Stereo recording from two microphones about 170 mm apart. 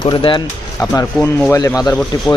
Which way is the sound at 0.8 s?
15° left (ahead or behind).